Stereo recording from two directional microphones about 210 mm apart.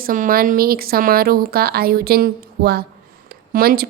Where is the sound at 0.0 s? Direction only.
40° right (ahead or behind).